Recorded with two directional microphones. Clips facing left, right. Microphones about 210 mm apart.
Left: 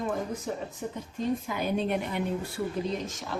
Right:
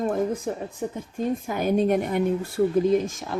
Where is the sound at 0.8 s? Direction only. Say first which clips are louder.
Right 8 dB; 65° right (ahead or behind).